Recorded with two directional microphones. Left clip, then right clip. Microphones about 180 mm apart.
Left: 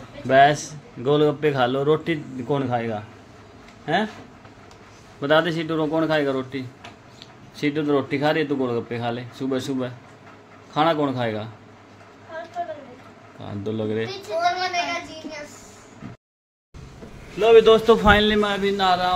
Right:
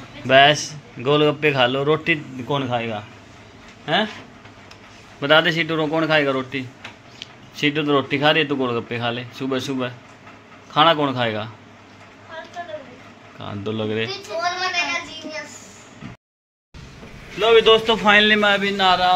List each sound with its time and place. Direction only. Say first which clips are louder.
0.3 s a man's voice: right 2 dB; 10° left (ahead or behind)
5.2 s a man's voice: right 4 dB; 10° left (ahead or behind)
13.4 s a man's voice: right 2 dB; 10° left (ahead or behind)
17.4 s a man's voice: left 1 dB; 25° left (ahead or behind)
17.6 s a man's voice: even; 40° left (ahead or behind)
18.0 s a man's voice: right 3 dB; 15° left (ahead or behind)
18.4 s a man's voice: right 4 dB; 5° right (ahead or behind)